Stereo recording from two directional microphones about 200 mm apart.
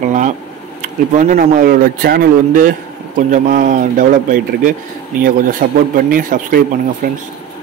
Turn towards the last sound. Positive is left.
turn(degrees=-45)  # may be behind; listen again after turning